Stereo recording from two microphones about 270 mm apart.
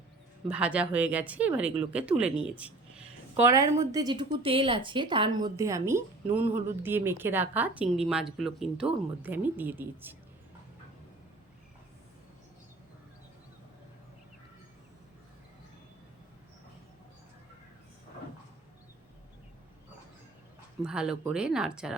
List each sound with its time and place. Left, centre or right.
0.5 s speech: centre
20.8 s speech: centre